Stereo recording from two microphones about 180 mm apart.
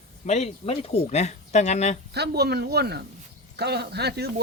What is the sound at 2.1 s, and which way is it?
Speech, 65° right (ahead or behind).